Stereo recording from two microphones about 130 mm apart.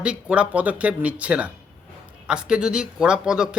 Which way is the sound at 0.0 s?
10° right (ahead or behind).